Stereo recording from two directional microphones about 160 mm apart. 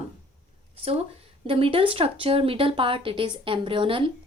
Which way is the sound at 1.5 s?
35° right (ahead or behind).